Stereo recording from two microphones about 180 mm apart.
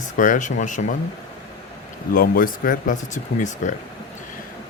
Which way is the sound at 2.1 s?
55° left (ahead or behind).